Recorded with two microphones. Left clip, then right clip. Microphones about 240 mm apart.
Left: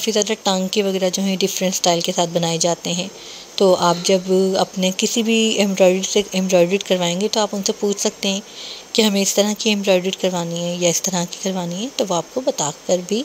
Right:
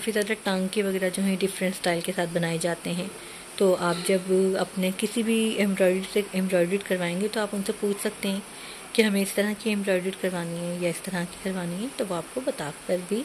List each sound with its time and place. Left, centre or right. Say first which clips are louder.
0.0 s speech: left 8 dB; centre